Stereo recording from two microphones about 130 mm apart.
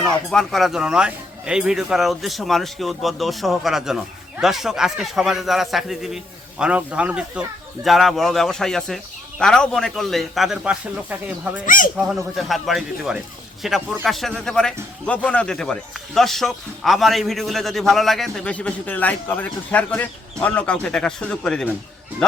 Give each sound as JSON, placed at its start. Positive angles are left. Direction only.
{"t": 0.0, "sound": "a man's voice", "side_deg": 5}
{"t": 11.6, "sound": "speech", "side_deg": 90}
{"t": 11.9, "sound": "a man's voice", "side_deg": -5}